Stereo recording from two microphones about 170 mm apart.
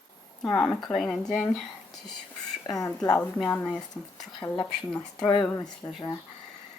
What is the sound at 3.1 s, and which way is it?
Speech, 10° left (ahead or behind).